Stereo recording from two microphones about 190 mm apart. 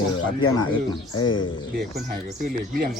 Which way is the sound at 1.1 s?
25° left (ahead or behind).